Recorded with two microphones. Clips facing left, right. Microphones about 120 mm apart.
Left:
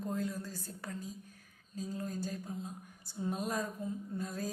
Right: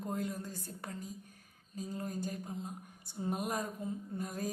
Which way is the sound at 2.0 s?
15° right (ahead or behind).